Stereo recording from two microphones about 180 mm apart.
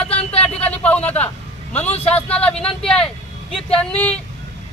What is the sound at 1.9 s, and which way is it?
Speech, 35° left (ahead or behind).